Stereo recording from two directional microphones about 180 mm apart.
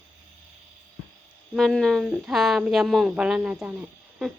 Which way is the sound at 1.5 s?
Centre (ahead or behind).